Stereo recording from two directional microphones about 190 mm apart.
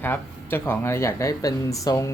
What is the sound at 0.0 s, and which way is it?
Speech, 10° left (ahead or behind).